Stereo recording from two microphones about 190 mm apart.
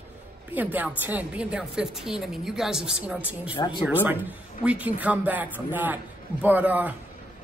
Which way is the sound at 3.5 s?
25° left (ahead or behind).